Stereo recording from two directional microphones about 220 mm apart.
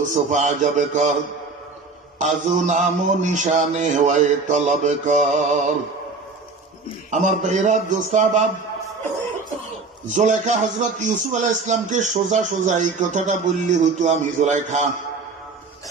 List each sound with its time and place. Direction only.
0.0 s a man's voice: 35° right (ahead or behind)
2.1 s a man's voice: 35° right (ahead or behind)
7.1 s a man's voice: 30° right (ahead or behind)
10.1 s a man's voice: 35° right (ahead or behind)